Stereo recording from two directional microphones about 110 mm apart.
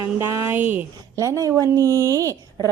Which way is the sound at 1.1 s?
30° right (ahead or behind).